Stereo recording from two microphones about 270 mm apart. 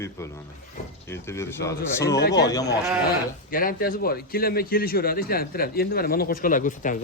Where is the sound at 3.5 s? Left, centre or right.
Left.